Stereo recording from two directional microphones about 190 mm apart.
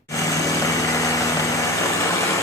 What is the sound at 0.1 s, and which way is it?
Vehicle, 15° left (ahead or behind).